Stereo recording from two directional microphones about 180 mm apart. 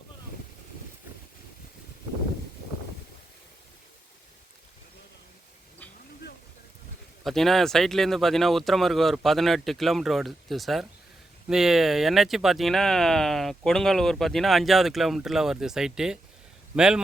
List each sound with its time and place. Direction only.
7.3 s speech: centre (ahead or behind)